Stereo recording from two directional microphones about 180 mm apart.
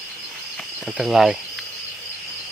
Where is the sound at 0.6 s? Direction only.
Centre (ahead or behind).